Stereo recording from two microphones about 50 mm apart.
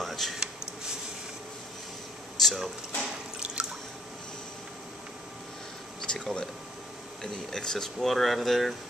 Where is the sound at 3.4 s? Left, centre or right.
Centre.